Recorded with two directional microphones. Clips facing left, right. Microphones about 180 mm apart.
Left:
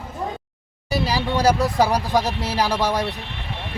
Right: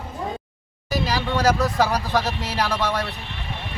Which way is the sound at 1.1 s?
10° left (ahead or behind).